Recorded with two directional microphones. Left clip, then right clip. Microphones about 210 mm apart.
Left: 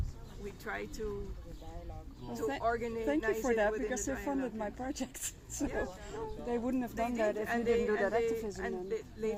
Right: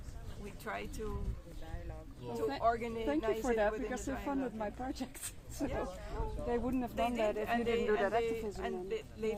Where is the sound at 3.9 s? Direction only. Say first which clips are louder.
Left 3 dB; 15° left (ahead or behind).